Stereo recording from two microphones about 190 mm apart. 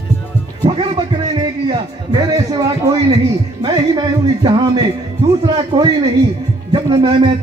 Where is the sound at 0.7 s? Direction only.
25° right (ahead or behind).